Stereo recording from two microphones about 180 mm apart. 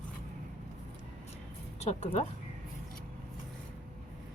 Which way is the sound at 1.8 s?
40° left (ahead or behind).